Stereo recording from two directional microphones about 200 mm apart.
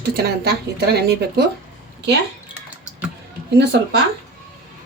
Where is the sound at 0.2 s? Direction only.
50° right (ahead or behind).